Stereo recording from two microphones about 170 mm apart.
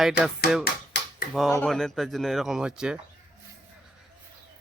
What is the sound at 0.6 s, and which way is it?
Tap, 60° left (ahead or behind).